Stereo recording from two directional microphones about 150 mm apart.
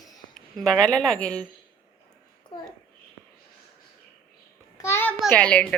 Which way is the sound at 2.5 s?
30° left (ahead or behind).